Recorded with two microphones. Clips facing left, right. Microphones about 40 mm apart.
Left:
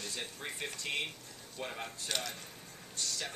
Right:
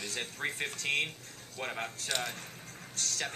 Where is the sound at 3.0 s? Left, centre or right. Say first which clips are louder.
Right 3 dB; right.